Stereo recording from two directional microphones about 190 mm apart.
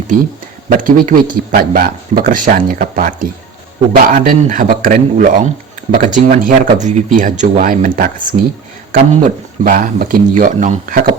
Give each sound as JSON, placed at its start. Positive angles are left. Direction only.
{"t": 0.7, "sound": "speech", "side_deg": -45}